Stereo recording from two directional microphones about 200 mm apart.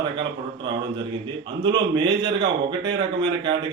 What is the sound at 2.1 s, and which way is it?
A man's voice, 25° right (ahead or behind).